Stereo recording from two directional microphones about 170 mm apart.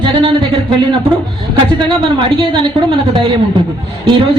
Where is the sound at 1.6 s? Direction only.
30° right (ahead or behind).